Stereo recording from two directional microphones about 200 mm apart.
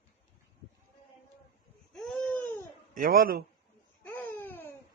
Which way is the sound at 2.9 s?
45° right (ahead or behind).